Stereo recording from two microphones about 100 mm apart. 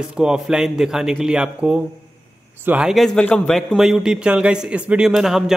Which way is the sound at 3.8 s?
5° right (ahead or behind).